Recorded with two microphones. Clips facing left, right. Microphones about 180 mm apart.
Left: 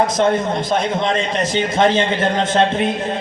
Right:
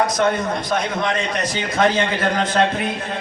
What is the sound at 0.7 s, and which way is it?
A man's voice, 25° left (ahead or behind).